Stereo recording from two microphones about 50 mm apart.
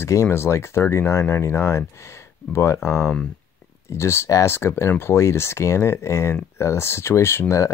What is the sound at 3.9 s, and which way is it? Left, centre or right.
Speech, left.